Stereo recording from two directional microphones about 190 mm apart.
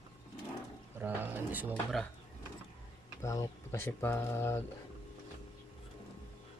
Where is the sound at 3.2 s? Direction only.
15° left (ahead or behind).